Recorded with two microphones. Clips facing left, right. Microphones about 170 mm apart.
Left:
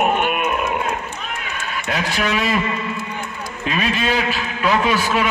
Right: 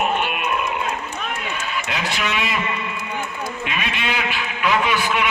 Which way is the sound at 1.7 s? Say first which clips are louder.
Left 4 dB; 45° left (ahead or behind).